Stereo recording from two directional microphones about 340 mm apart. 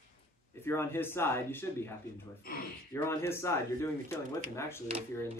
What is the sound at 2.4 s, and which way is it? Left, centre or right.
Speech, left.